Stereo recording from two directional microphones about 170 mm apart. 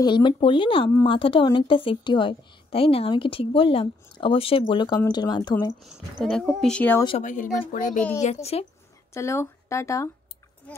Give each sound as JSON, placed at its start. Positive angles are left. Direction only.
{"t": 0.0, "sound": "a woman's voice", "side_deg": 25}
{"t": 5.8, "sound": "speech", "side_deg": 5}
{"t": 7.2, "sound": "speech", "side_deg": 50}
{"t": 9.1, "sound": "speech", "side_deg": 15}